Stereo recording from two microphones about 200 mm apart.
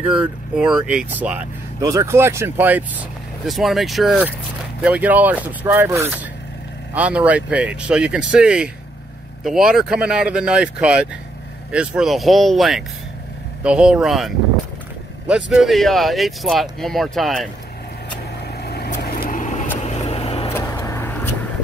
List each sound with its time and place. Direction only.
0.0 s speech: 5° right (ahead or behind)
18.6 s vehicle: 50° left (ahead or behind); by 20.5 s 30° left (ahead or behind)
20.5 s vehicle: 10° left (ahead or behind)